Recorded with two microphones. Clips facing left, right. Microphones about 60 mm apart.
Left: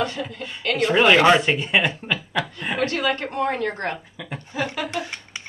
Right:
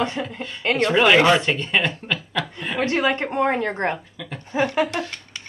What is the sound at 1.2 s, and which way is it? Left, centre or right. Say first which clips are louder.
Speech: left 1 dB; centre.